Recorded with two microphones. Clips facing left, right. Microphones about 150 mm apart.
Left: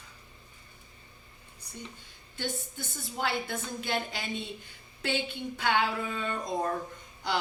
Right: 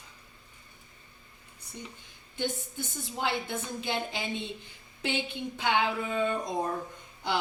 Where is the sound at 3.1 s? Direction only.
20° right (ahead or behind).